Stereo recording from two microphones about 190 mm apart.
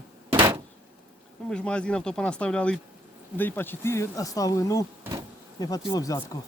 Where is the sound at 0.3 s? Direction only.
10° right (ahead or behind).